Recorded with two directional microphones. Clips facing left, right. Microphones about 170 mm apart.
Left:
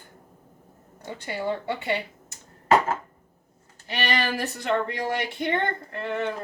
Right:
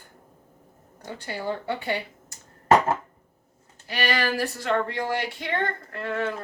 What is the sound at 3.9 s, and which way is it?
Speech, 25° left (ahead or behind).